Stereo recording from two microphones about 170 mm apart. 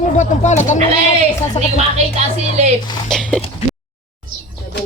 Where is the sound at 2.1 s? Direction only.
40° right (ahead or behind).